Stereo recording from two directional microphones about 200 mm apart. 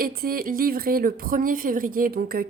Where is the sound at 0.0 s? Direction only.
45° right (ahead or behind).